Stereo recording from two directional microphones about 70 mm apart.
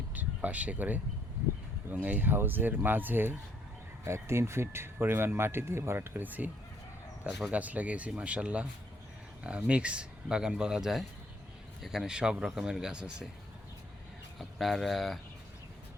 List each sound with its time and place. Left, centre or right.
0.1 s speech: right
4.0 s speech: right
7.5 s speech: right
14.3 s speech: centre